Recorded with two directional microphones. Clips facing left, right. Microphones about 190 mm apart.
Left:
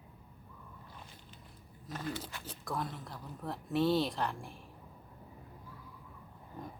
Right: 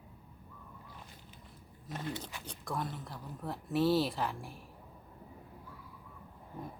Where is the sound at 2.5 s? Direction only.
Centre (ahead or behind).